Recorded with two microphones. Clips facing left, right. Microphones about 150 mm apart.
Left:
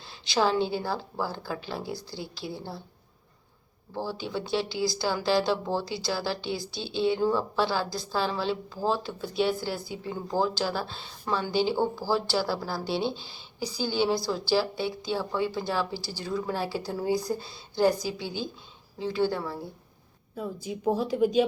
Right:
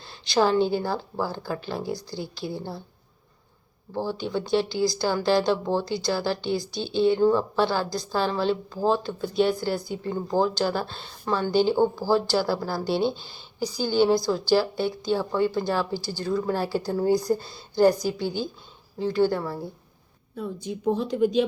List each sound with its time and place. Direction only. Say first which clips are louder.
0.0 s a woman's voice: right 3 dB; centre (ahead or behind)
3.9 s speech: right 4 dB; 5° left (ahead or behind)